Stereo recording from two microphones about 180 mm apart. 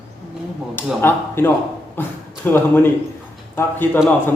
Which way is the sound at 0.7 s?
10° left (ahead or behind).